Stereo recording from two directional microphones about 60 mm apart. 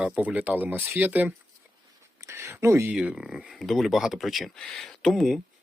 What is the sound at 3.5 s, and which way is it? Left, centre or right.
Speech, centre.